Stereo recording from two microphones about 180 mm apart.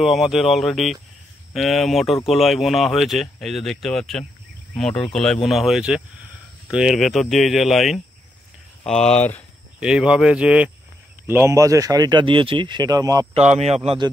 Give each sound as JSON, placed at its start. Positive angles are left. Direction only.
{"t": 0.0, "sound": "speech", "side_deg": 0}
{"t": 9.8, "sound": "speech", "side_deg": -5}
{"t": 13.3, "sound": "speech", "side_deg": -40}
{"t": 13.8, "sound": "speech", "side_deg": -25}